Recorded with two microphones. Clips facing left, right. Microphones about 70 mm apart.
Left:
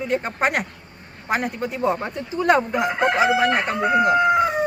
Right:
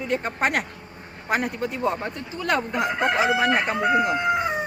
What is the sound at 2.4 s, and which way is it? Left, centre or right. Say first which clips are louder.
Speech: left 6 dB; left.